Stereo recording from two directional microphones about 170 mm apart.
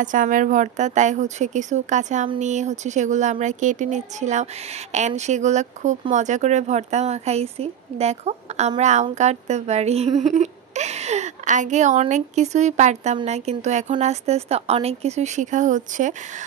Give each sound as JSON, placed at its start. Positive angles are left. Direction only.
{"t": 0.0, "sound": "speech", "side_deg": -50}